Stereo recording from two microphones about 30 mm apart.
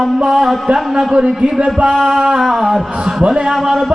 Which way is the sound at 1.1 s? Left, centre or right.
Right.